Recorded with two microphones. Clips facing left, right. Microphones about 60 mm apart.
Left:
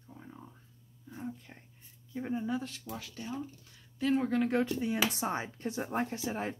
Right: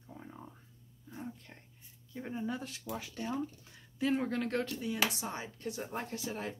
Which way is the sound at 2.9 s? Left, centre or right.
Right.